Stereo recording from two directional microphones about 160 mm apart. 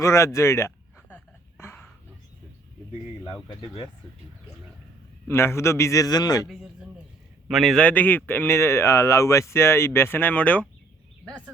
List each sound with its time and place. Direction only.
0.0 s a man's voice: 20° left (ahead or behind)
1.1 s a sound: 15° left (ahead or behind)
3.4 s speech: 35° left (ahead or behind)
5.3 s a man's voice: 15° left (ahead or behind)
6.5 s a man's voice: centre (ahead or behind)